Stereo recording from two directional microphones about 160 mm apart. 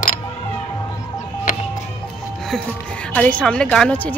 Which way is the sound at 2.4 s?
5° left (ahead or behind).